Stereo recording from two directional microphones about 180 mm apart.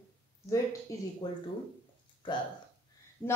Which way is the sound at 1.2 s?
25° left (ahead or behind).